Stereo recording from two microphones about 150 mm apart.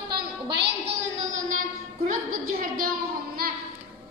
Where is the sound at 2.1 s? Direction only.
75° right (ahead or behind).